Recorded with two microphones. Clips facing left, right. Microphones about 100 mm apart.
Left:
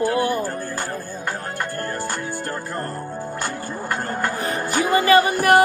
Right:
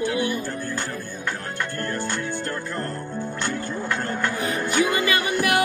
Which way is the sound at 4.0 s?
40° left (ahead or behind).